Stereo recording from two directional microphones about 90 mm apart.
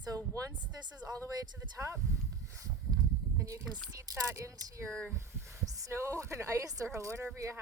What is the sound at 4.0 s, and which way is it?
Speech, 35° right (ahead or behind).